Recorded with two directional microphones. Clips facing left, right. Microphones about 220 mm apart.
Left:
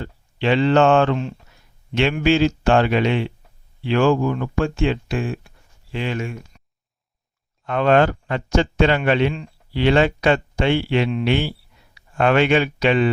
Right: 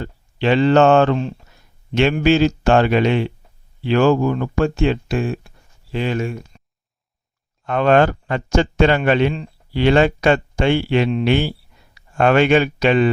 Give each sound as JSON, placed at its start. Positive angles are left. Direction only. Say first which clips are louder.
{"t": 0.0, "sound": "speech", "louder": "right 2 dB", "side_deg": -45}
{"t": 7.6, "sound": "speech", "louder": "right 2 dB", "side_deg": -45}